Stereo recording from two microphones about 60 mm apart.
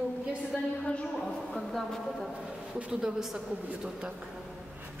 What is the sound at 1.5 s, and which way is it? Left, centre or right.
Speech, centre.